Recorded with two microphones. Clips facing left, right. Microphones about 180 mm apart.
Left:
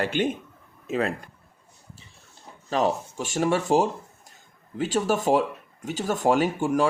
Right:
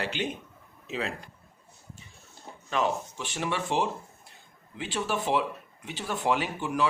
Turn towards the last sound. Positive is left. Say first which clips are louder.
# left 7 dB
turn(degrees=45)  # may be behind; listen again after turning